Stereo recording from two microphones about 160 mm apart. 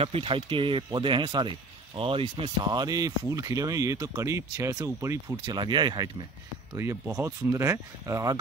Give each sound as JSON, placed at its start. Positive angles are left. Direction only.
{"t": 0.0, "sound": "speech", "side_deg": -35}